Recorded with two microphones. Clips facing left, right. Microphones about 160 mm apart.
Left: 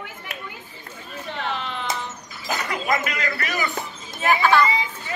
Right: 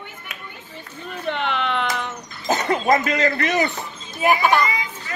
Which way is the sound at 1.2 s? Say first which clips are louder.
Right 6 dB; 70° right (ahead or behind).